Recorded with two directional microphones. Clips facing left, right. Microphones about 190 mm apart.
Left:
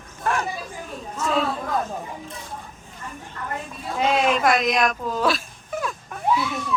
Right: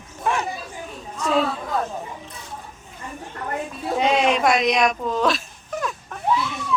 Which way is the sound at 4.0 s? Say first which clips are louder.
Right 1 dB; centre (ahead or behind).